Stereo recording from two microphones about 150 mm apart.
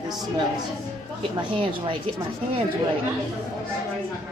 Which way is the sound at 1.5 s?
35° right (ahead or behind).